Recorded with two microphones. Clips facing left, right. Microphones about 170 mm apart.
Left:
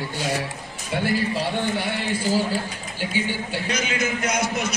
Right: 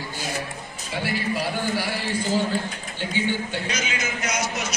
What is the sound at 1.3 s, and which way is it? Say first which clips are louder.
Speech: left 1 dB; 25° left (ahead or behind).